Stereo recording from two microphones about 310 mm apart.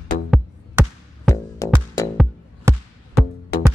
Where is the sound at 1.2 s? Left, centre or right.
Centre.